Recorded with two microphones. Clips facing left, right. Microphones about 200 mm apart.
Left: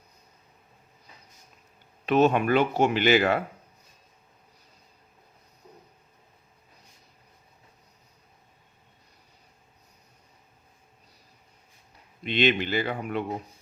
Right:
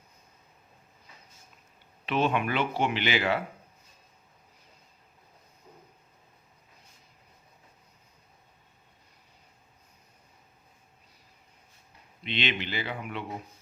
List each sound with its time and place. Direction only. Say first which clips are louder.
2.0 s speech: left 6 dB; 45° left (ahead or behind)
12.2 s speech: left 8 dB; 45° left (ahead or behind)